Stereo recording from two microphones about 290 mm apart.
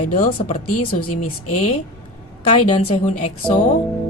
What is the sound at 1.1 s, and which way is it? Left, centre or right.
Speech, left.